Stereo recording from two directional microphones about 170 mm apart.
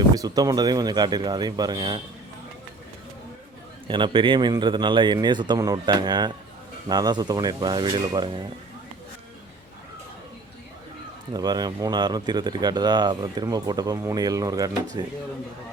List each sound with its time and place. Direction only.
0.2 s speech: 20° right (ahead or behind)
3.8 s speech: 30° right (ahead or behind)
11.3 s speech: 25° right (ahead or behind)